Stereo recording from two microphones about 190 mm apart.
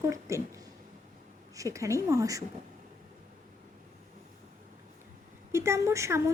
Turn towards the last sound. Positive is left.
turn(degrees=-15)  # may be behind; listen again after turning